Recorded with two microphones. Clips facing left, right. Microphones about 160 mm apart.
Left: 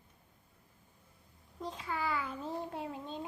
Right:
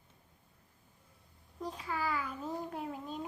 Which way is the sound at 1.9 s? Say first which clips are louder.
Even; 25° left (ahead or behind).